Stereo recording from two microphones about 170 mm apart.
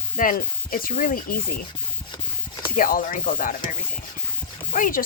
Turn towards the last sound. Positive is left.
turn(degrees=55)  # may be behind; listen again after turning